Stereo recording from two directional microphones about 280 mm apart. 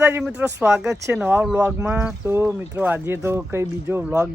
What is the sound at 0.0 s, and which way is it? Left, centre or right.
Speech, centre.